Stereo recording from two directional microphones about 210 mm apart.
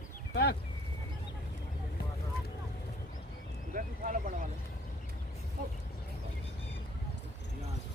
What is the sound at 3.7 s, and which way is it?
Speech, 40° right (ahead or behind).